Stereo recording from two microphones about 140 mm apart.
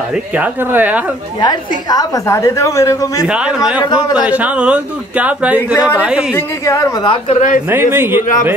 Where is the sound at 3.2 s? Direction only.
5° right (ahead or behind).